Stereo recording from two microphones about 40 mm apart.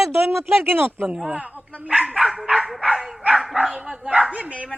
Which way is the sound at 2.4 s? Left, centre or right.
Right.